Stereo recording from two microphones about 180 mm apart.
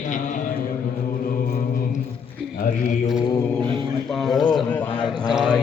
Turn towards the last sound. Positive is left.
turn(degrees=0)  # may be behind; listen again after turning